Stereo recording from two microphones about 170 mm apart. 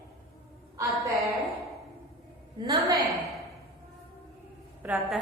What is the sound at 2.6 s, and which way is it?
Speech, 25° right (ahead or behind).